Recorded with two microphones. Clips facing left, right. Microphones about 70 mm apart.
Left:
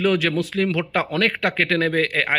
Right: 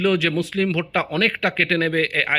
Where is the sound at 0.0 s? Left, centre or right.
Left.